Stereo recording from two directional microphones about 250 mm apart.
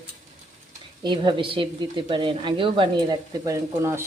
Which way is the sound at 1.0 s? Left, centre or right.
Centre.